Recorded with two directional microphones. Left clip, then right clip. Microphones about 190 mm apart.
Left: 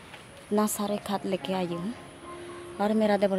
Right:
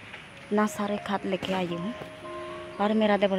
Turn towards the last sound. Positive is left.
turn(degrees=5)  # may be behind; listen again after turning